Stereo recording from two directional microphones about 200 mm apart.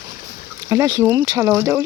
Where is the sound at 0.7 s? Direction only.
15° right (ahead or behind).